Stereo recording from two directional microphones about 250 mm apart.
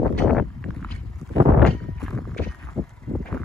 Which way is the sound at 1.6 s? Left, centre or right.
Centre.